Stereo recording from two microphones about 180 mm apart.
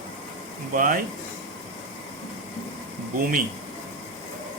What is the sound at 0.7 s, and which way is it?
Speech, 50° right (ahead or behind).